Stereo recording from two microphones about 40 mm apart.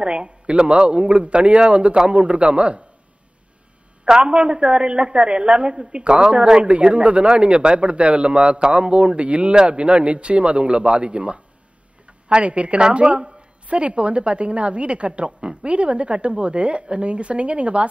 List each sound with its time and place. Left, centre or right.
0.0 s a man's voice: right
4.0 s a man's voice: right